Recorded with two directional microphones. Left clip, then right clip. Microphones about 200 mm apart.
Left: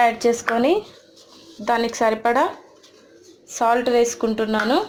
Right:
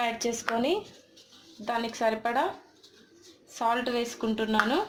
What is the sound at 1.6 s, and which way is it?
Speech, 25° left (ahead or behind).